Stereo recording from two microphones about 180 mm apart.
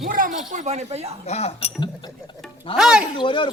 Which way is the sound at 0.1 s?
50° right (ahead or behind).